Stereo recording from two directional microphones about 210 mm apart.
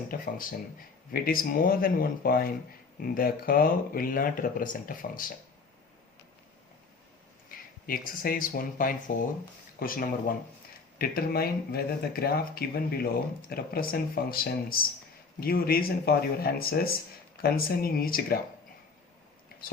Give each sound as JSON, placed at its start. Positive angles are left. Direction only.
{"t": 0.1, "sound": "speech", "side_deg": 45}
{"t": 7.5, "sound": "a sound", "side_deg": 40}
{"t": 7.9, "sound": "speech", "side_deg": 45}